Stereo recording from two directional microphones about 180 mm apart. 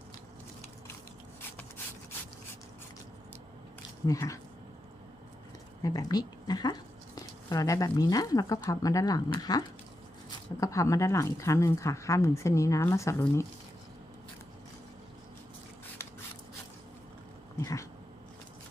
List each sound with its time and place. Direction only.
4.0 s speech: 20° left (ahead or behind)
5.8 s speech: 20° left (ahead or behind)
16.0 s rub: 15° left (ahead or behind)
17.6 s cat: 15° left (ahead or behind)